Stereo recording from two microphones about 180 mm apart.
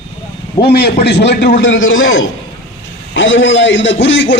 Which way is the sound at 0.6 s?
60° left (ahead or behind).